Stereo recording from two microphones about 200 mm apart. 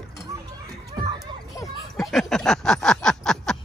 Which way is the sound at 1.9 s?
Centre (ahead or behind).